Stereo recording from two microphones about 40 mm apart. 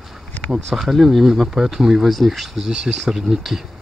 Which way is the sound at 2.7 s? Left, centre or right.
Centre.